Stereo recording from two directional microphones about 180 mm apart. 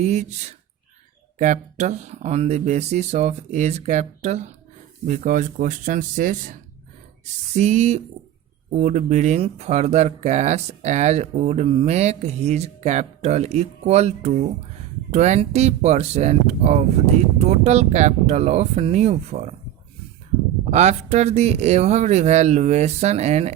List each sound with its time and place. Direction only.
0.0 s speech: 40° right (ahead or behind)
20.7 s speech: 40° right (ahead or behind)